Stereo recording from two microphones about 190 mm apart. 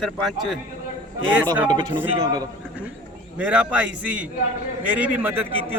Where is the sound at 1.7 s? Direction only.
25° right (ahead or behind).